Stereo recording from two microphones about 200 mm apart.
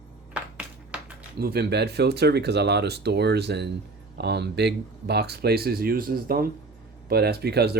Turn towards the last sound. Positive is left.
turn(degrees=-55)  # may be behind; listen again after turning